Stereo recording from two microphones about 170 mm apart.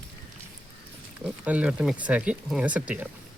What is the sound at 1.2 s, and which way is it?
Speech, 5° right (ahead or behind).